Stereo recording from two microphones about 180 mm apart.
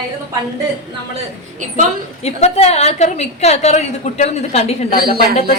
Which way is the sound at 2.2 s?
35° left (ahead or behind).